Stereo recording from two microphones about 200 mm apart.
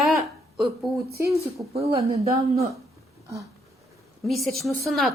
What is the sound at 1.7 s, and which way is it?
Speech, 30° right (ahead or behind).